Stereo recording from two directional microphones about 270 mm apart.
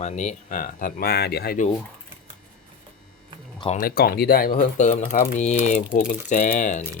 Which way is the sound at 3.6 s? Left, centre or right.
Left.